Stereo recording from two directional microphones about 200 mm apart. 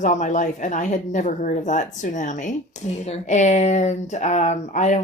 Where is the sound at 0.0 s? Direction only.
40° left (ahead or behind).